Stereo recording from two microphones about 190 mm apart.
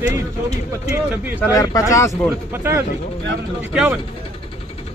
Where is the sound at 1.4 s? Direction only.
15° left (ahead or behind).